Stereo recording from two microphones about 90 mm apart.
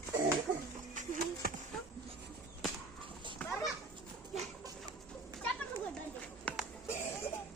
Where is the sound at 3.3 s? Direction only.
15° left (ahead or behind).